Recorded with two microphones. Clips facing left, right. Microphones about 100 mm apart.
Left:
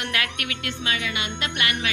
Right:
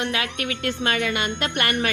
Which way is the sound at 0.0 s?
25° right (ahead or behind).